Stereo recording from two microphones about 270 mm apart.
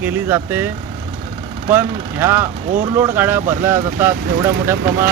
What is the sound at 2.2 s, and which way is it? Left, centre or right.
Speech, centre.